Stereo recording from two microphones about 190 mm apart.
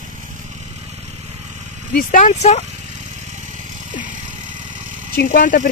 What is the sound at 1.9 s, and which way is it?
Speech, 45° left (ahead or behind).